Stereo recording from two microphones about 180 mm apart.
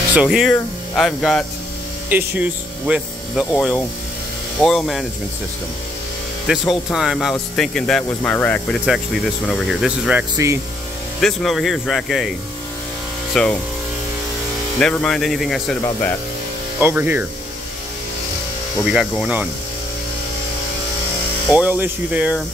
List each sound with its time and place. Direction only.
0.1 s speech: 5° right (ahead or behind)
2.0 s speech: 10° right (ahead or behind)
4.6 s speech: centre (ahead or behind)
6.4 s speech: centre (ahead or behind)
10.3 s speech: 15° right (ahead or behind)
11.1 s speech: centre (ahead or behind)
13.3 s speech: 5° left (ahead or behind)
14.8 s speech: 5° left (ahead or behind)
16.8 s speech: 10° right (ahead or behind)
18.9 s speech: 5° right (ahead or behind)
21.5 s speech: 10° right (ahead or behind)